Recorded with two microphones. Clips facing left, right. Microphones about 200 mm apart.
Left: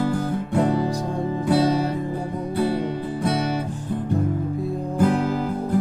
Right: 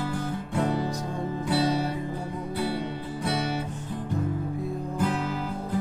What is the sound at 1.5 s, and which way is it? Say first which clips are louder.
Music: left 6 dB; 50° left (ahead or behind).